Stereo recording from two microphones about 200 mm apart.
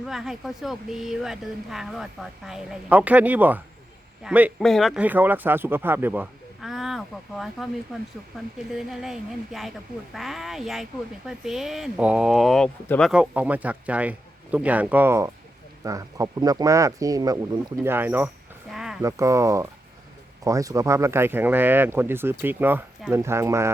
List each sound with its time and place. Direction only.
0.0 s speech: centre (ahead or behind)
18.7 s a sound: centre (ahead or behind)
19.0 s speech: 15° right (ahead or behind)